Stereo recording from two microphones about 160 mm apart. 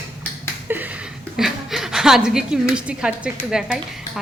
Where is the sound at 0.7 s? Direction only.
10° right (ahead or behind).